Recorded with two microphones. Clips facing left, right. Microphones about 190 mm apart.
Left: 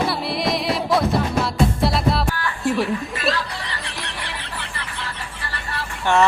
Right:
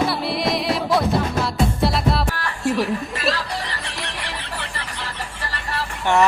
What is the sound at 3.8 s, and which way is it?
Chicken, centre (ahead or behind).